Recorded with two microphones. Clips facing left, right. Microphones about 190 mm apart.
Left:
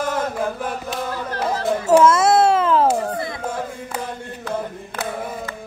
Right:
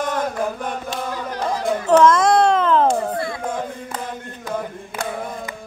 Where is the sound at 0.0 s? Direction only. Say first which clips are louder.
Even; 5° left (ahead or behind).